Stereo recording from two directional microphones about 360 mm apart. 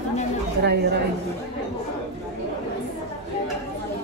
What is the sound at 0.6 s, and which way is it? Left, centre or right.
Speech, right.